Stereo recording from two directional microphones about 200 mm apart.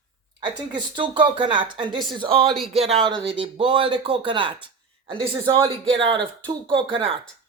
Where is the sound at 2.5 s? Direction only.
Centre (ahead or behind).